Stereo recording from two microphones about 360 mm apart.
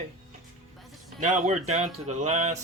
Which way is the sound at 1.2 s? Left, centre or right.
Centre.